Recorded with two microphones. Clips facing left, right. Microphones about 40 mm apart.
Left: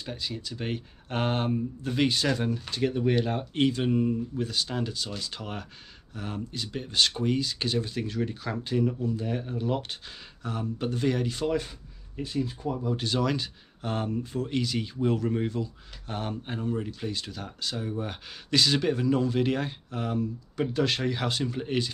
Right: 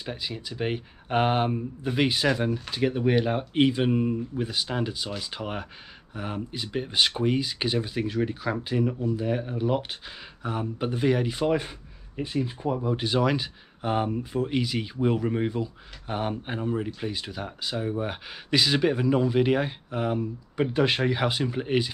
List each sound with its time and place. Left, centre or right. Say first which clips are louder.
0.0 s speech: right 1 dB; centre